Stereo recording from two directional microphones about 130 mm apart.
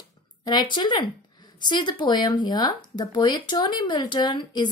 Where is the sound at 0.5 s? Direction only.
35° left (ahead or behind).